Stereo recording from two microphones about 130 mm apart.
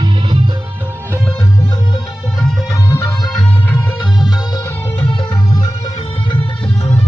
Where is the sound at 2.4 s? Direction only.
5° left (ahead or behind).